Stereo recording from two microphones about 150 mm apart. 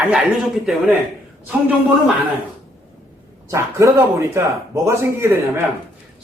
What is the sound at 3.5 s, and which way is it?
Speech, 20° right (ahead or behind).